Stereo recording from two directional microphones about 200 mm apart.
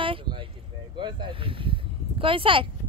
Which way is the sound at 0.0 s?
25° right (ahead or behind).